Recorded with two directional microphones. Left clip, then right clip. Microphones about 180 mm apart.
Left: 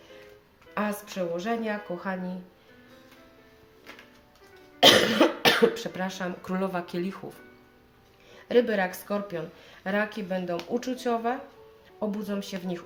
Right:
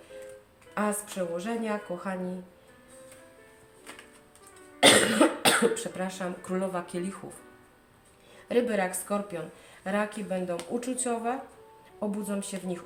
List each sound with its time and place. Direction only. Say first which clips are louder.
0.7 s a woman's voice: even; 35° left (ahead or behind)
4.8 s speech: left 2 dB; 40° left (ahead or behind)
8.4 s a woman's voice: left 3 dB; 40° left (ahead or behind)